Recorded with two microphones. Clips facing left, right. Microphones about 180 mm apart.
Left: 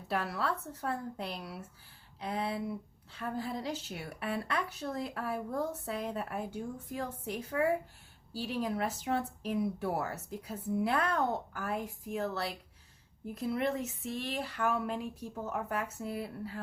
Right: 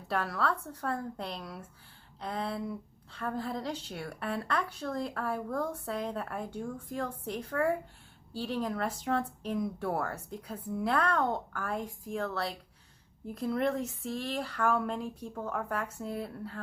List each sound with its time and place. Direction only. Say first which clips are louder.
0.1 s a woman's voice: right 2 dB; 5° left (ahead or behind)
5.5 s a woman's voice: right 1 dB; 25° left (ahead or behind)
5.8 s a woman's voice: right 1 dB; 5° left (ahead or behind)
15.0 s a woman's voice: right 1 dB; 30° right (ahead or behind)
15.4 s a woman's voice: right 1 dB; 5° left (ahead or behind)